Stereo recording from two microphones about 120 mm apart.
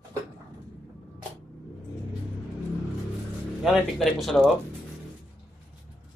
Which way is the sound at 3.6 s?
Centre (ahead or behind).